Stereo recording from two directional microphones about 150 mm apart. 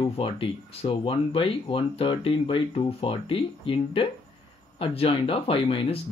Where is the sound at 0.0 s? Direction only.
40° left (ahead or behind).